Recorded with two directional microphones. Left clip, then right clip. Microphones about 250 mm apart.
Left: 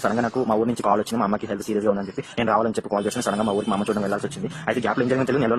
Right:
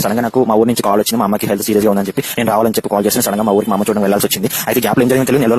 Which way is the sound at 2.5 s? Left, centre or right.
Right.